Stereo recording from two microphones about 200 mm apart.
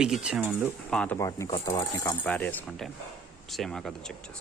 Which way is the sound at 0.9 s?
5° left (ahead or behind).